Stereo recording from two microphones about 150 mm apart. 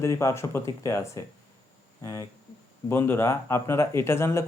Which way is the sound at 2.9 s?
15° left (ahead or behind).